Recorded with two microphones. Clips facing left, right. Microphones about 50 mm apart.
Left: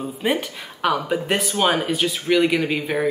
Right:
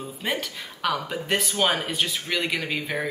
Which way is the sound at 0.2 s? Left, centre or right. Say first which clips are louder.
Left 6 dB; centre.